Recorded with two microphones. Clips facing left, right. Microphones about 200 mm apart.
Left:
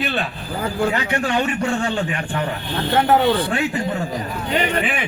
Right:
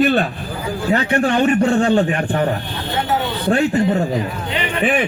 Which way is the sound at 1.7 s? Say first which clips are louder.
Right 7 dB; 45° right (ahead or behind).